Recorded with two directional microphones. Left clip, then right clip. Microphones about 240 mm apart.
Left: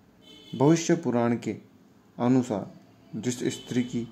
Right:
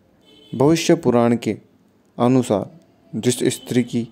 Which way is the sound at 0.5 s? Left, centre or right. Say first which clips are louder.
Right 7 dB; right.